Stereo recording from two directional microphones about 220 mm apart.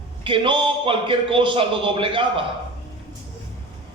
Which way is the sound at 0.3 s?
20° right (ahead or behind).